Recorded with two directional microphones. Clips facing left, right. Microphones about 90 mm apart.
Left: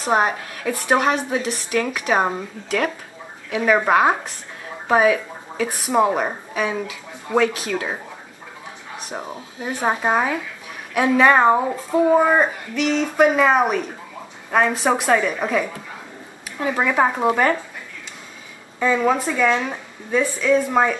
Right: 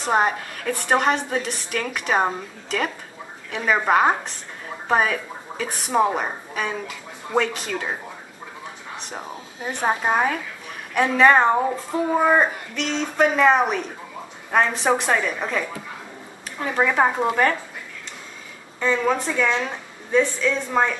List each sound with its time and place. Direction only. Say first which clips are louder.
0.0 s a woman's voice: left 1 dB; 5° left (ahead or behind)
8.9 s a sound: left 4 dB; 5° left (ahead or behind)
9.7 s a woman's voice: left 1 dB; 10° left (ahead or behind)
16.6 s speech: left 1 dB; 5° left (ahead or behind)
18.8 s a woman's voice: left 3 dB; 10° left (ahead or behind)